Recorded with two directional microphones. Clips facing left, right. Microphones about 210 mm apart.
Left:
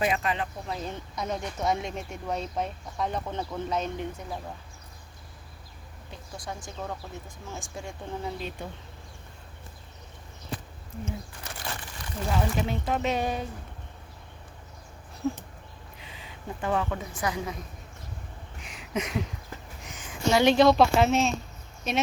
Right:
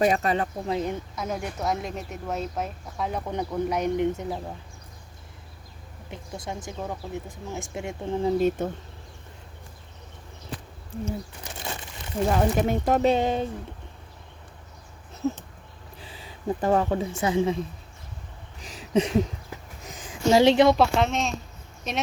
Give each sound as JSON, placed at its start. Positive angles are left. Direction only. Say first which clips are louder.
{"t": 0.0, "sound": "speech", "louder": "right 5 dB", "side_deg": -40}
{"t": 0.7, "sound": "speech", "louder": "right 10 dB", "side_deg": -20}
{"t": 1.1, "sound": "speech", "louder": "right 1 dB", "side_deg": -5}
{"t": 6.1, "sound": "speech", "louder": "right 4 dB", "side_deg": -20}
{"t": 8.4, "sound": "speech", "louder": "right 13 dB", "side_deg": -45}
{"t": 11.4, "sound": "crumpling", "louder": "right 2 dB", "side_deg": -20}
{"t": 12.3, "sound": "speech", "louder": "right 5 dB", "side_deg": -50}
{"t": 13.1, "sound": "speech", "louder": "right 5 dB", "side_deg": -25}
{"t": 16.0, "sound": "speech", "louder": "right 3 dB", "side_deg": -35}
{"t": 18.6, "sound": "a sound", "louder": "right 8 dB", "side_deg": -35}
{"t": 20.1, "sound": "a woman's voice", "louder": "right 4 dB", "side_deg": -30}
{"t": 20.7, "sound": "speech", "louder": "left 1 dB", "side_deg": 0}